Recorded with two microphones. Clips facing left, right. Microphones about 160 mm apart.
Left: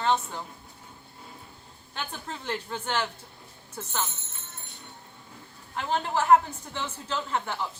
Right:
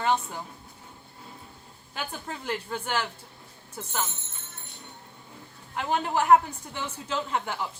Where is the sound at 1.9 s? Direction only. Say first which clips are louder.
Right 1 dB; 5° right (ahead or behind).